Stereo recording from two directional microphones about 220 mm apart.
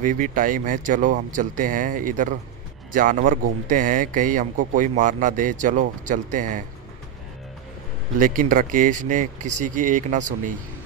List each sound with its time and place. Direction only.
0.0 s a man's voice: 35° right (ahead or behind)
8.2 s a man's voice: 40° right (ahead or behind)